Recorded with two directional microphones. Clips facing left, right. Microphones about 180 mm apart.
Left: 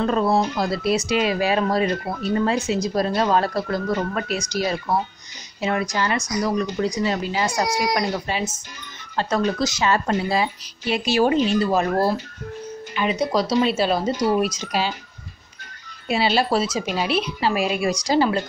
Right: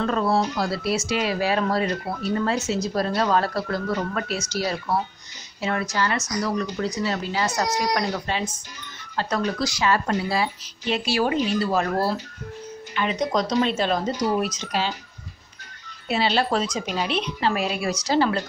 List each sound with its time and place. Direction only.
0.0 s speech: 15° left (ahead or behind)
9.1 s a woman's voice: 25° left (ahead or behind)
16.1 s speech: 10° left (ahead or behind)